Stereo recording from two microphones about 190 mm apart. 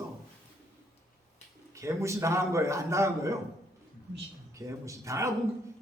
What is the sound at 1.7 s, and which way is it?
A man's voice, 15° right (ahead or behind).